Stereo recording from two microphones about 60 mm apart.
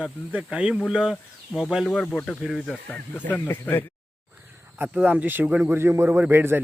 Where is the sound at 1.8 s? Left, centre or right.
Centre.